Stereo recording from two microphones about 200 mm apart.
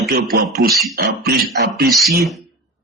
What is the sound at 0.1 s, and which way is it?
Speech, 50° right (ahead or behind).